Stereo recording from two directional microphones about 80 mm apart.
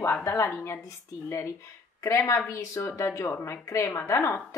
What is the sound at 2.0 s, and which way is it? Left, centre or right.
A woman's voice, left.